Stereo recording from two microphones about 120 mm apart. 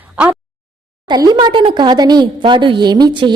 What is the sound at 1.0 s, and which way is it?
A woman's voice, 35° right (ahead or behind).